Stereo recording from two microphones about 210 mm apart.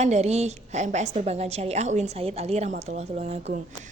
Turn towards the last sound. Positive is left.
turn(degrees=-30)  # may be behind; listen again after turning